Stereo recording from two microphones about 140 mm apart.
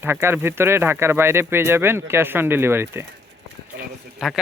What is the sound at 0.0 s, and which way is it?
Speech, 15° right (ahead or behind).